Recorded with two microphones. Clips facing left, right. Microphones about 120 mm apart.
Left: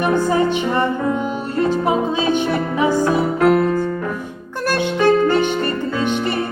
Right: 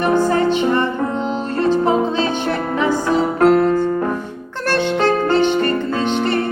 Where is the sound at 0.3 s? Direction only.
15° left (ahead or behind).